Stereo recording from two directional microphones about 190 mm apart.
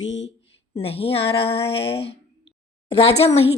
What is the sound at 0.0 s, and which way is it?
Speech, 75° left (ahead or behind).